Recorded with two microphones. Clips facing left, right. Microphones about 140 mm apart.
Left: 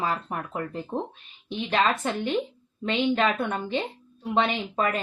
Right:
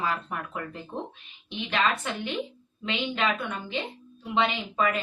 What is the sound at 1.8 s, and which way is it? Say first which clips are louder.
A woman's voice: left 3 dB; 35° left (ahead or behind).